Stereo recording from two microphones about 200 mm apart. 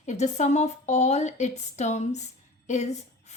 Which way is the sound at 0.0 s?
35° left (ahead or behind).